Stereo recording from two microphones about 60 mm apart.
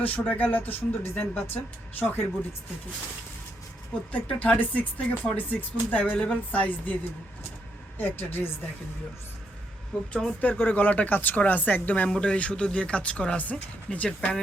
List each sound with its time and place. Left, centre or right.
0.0 s speech: left
4.1 s speech: left
6.1 s speech: centre
9.9 s speech: left